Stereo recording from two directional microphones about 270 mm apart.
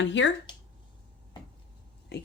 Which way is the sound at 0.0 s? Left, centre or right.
Left.